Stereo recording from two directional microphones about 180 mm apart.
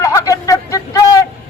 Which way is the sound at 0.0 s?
20° left (ahead or behind).